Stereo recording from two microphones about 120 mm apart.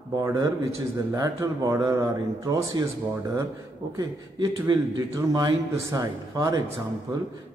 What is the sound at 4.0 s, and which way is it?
A man's voice, 35° right (ahead or behind).